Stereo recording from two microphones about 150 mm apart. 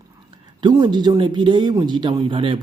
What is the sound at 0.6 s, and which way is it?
Speech, 30° right (ahead or behind).